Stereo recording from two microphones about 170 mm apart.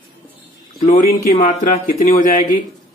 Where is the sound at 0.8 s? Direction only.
50° left (ahead or behind).